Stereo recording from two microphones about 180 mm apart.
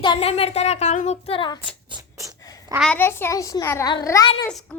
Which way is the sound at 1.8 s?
20° right (ahead or behind).